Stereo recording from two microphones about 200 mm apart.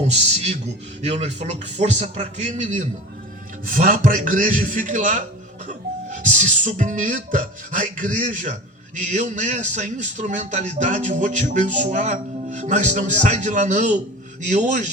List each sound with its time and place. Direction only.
0.1 s a man's voice: 35° right (ahead or behind)